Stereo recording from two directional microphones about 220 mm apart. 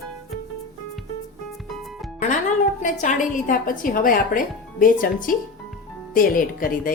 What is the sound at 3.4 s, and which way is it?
Speech, 40° left (ahead or behind).